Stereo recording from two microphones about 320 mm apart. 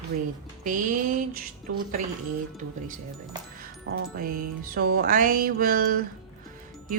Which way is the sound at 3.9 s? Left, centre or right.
Right.